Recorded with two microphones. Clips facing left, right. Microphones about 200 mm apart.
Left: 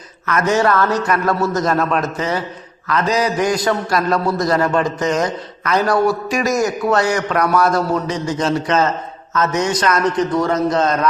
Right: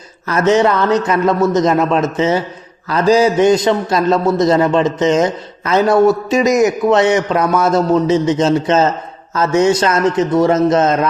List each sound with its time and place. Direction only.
0.3 s a man's voice: 25° right (ahead or behind)